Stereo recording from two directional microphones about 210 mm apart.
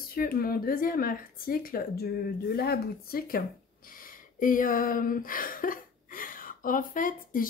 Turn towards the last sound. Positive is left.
turn(degrees=40)  # may be behind; listen again after turning